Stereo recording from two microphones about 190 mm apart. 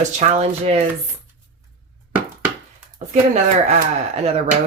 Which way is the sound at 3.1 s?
40° right (ahead or behind).